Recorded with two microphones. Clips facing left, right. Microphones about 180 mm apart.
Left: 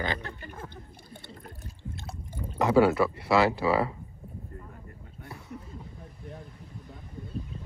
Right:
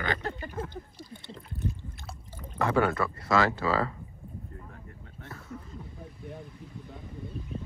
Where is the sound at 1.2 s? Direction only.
40° left (ahead or behind).